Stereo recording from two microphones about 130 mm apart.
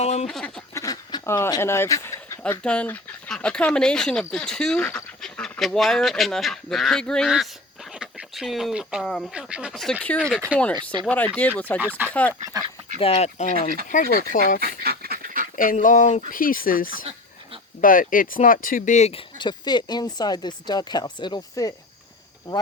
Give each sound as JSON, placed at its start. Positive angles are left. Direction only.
{"t": 0.0, "sound": "speech", "side_deg": 55}
{"t": 0.3, "sound": "speech", "side_deg": 5}
{"t": 0.7, "sound": "a sound", "side_deg": 25}
{"t": 2.4, "sound": "speech", "side_deg": 10}
{"t": 10.2, "sound": "speech", "side_deg": 5}
{"t": 11.8, "sound": "speech", "side_deg": -15}
{"t": 12.0, "sound": "speech", "side_deg": 10}
{"t": 13.0, "sound": "speech", "side_deg": 50}
{"t": 13.9, "sound": "speech", "side_deg": 90}
{"t": 15.2, "sound": "duck", "side_deg": -90}
{"t": 15.5, "sound": "a sound", "side_deg": 90}
{"t": 16.3, "sound": "speech", "side_deg": 90}
{"t": 19.4, "sound": "speech", "side_deg": 35}